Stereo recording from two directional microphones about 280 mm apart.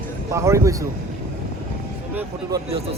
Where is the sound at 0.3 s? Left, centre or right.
Centre.